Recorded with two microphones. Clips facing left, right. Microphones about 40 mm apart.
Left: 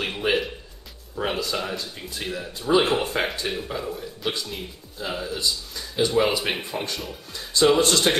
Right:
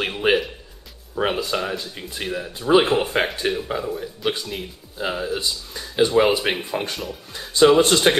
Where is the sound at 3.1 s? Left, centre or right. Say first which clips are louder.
Right 4 dB; right.